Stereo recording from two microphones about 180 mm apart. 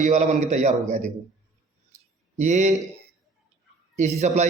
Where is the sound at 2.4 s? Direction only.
40° right (ahead or behind).